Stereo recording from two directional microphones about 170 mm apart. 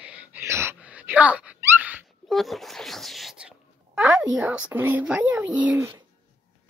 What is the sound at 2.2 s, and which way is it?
Wail, centre (ahead or behind).